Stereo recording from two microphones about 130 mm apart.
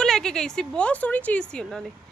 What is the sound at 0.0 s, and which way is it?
Speech, 5° left (ahead or behind).